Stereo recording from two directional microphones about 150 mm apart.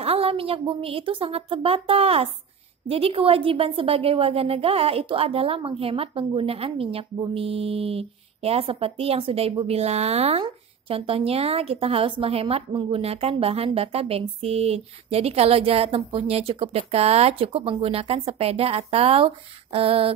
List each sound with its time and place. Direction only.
0.0 s a woman's voice: 40° right (ahead or behind)